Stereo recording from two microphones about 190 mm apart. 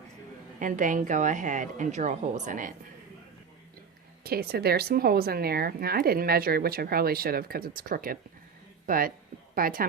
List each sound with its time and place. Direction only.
0.6 s a woman's voice: 40° right (ahead or behind)
4.2 s speech: 55° right (ahead or behind)